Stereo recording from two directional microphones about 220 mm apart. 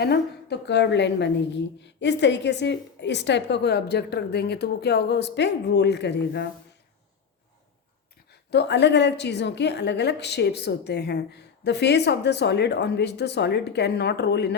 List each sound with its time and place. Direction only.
0.0 s a woman's voice: 50° left (ahead or behind)
8.3 s a woman's voice: 50° left (ahead or behind)